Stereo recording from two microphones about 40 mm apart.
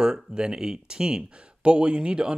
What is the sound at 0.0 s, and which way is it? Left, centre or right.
Speech, centre.